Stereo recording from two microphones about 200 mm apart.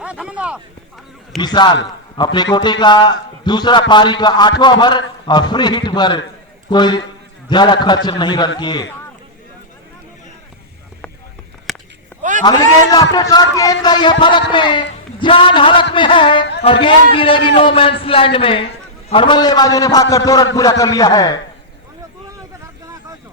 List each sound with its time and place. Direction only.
0.0 s speech: 5° right (ahead or behind)
1.4 s a man's voice: 20° left (ahead or behind)
11.7 s chop: centre (ahead or behind)
13.1 s a man's voice: 20° left (ahead or behind)